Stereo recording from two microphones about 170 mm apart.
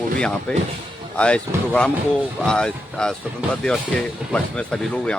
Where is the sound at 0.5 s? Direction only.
5° left (ahead or behind).